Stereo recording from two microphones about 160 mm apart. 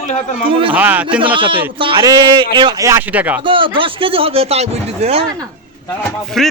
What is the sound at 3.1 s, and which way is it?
Speech, 10° right (ahead or behind).